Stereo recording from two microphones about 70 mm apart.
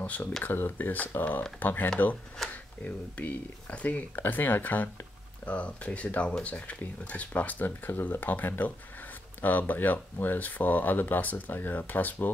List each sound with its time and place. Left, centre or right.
0.0 s speech: left
5.4 s speech: centre